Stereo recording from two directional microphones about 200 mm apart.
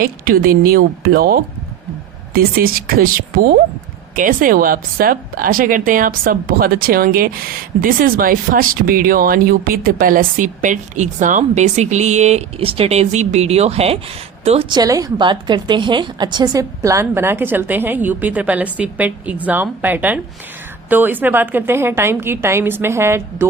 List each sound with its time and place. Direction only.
0.0 s a woman's voice: 45° right (ahead or behind); by 23.5 s 10° right (ahead or behind)